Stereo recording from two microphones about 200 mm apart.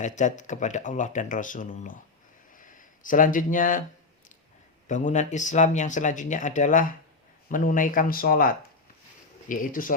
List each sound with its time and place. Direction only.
0.0 s speech: 40° left (ahead or behind)
2.5 s a sound: 40° left (ahead or behind)
4.9 s speech: 40° left (ahead or behind)